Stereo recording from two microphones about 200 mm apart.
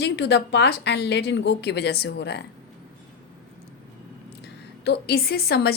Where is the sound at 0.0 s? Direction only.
60° left (ahead or behind).